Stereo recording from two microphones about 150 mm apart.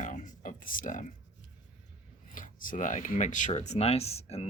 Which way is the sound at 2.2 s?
65° left (ahead or behind).